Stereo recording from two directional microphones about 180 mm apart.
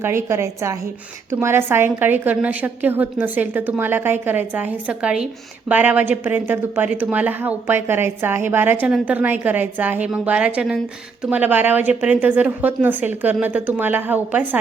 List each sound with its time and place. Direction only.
0.0 s a woman's voice: 15° right (ahead or behind)